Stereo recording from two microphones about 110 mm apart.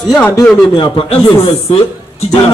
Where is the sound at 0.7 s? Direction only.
55° left (ahead or behind).